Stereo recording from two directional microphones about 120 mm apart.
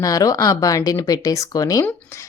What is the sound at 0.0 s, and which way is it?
Speech, 30° left (ahead or behind).